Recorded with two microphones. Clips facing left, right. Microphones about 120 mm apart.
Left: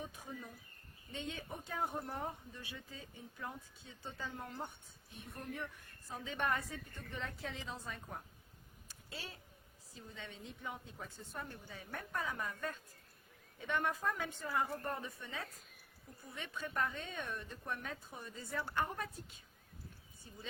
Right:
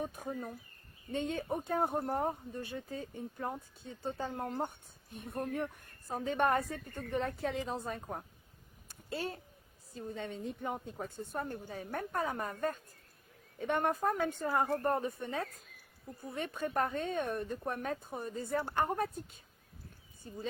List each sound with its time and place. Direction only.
0.0 s speech: 50° right (ahead or behind)
8.9 s a sound: 50° right (ahead or behind)
9.9 s speech: 50° right (ahead or behind)